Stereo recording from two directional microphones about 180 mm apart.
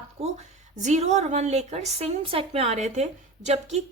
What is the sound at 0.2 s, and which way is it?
A woman's voice, 35° right (ahead or behind).